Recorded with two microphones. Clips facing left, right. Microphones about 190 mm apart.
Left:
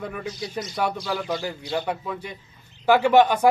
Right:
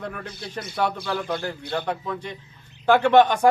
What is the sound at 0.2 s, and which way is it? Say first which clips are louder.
Speech: left 5 dB; 55° right (ahead or behind).